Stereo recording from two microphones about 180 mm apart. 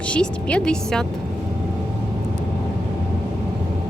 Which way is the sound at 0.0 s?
5° left (ahead or behind).